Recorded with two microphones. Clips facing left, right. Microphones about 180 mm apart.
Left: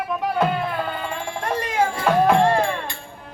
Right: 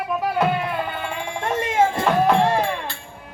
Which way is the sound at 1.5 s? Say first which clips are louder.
Right 3 dB; 25° right (ahead or behind).